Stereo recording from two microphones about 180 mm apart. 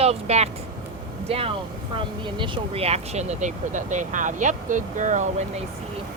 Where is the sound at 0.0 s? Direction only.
35° right (ahead or behind).